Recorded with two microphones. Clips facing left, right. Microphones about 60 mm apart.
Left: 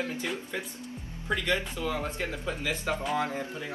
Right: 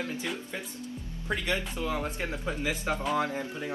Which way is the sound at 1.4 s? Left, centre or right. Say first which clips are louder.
Even; right.